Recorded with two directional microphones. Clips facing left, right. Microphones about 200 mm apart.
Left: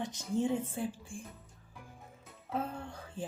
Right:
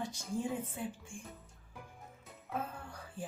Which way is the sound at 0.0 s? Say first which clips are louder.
Left 5 dB; 20° left (ahead or behind).